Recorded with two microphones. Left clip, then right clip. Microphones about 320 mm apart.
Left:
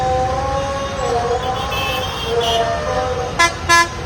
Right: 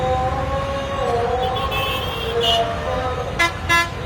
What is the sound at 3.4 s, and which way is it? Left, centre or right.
Vehicle, left.